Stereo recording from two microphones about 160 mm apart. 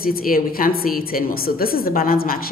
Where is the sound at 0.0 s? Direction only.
65° left (ahead or behind).